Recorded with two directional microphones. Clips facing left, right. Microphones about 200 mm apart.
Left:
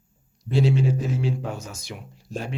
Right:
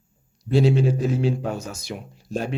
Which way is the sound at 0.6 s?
35° right (ahead or behind).